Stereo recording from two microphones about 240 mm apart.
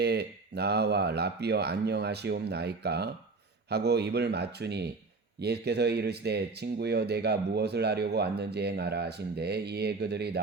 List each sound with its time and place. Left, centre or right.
0.0 s speech: right